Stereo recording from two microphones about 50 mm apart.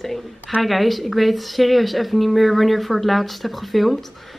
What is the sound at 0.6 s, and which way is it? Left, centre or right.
Speech, centre.